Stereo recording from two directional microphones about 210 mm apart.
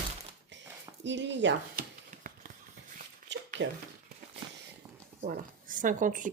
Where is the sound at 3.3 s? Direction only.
60° right (ahead or behind).